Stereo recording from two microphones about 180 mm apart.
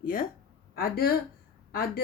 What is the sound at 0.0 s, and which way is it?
Speech, 50° left (ahead or behind).